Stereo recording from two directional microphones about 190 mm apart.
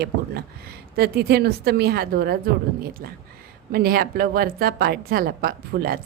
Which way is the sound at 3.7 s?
50° right (ahead or behind).